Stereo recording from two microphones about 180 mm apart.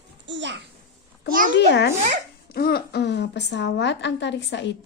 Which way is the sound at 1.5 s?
70° left (ahead or behind).